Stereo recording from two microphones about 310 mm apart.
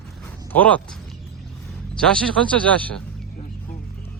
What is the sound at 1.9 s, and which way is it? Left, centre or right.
Speech, centre.